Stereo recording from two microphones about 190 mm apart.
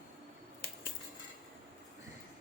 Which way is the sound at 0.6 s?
55° left (ahead or behind).